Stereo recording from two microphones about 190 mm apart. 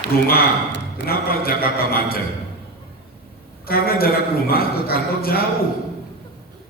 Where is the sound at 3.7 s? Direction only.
55° left (ahead or behind).